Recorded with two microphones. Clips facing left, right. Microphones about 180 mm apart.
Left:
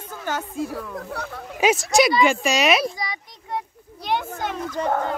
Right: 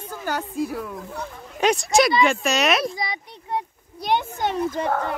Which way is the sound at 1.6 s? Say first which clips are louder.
Even; 5° left (ahead or behind).